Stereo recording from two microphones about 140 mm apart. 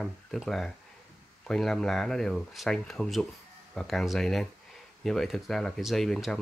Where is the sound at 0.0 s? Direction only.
Centre (ahead or behind).